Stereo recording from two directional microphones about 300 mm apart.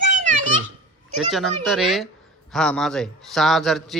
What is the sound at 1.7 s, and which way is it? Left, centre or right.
Speech, centre.